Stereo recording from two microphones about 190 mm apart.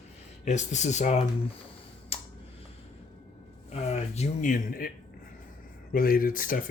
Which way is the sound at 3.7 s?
35° left (ahead or behind).